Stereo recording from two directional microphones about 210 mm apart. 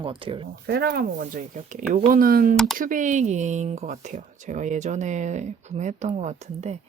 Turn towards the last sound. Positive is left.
turn(degrees=-30)  # may be behind; listen again after turning